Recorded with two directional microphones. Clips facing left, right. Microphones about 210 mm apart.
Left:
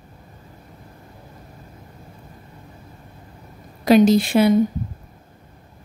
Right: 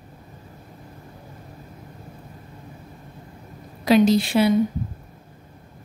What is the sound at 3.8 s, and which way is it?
Speech, 45° left (ahead or behind).